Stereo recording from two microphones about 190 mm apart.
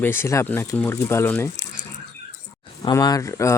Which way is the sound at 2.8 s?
20° left (ahead or behind).